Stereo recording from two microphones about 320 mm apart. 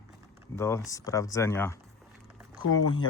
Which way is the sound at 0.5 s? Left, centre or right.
Centre.